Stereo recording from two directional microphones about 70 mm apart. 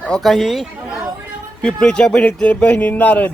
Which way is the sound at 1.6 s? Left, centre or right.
Centre.